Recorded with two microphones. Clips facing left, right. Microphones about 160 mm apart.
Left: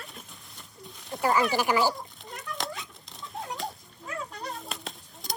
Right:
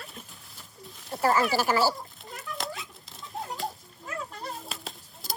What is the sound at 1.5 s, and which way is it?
Speech, 15° left (ahead or behind).